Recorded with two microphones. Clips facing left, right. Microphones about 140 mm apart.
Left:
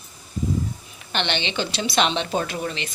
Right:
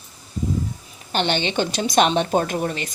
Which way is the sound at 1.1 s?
40° right (ahead or behind).